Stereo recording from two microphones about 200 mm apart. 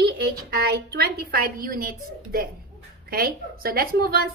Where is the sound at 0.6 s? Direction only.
55° right (ahead or behind).